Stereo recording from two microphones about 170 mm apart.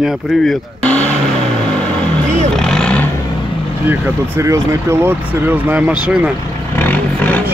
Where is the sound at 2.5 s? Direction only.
5° left (ahead or behind).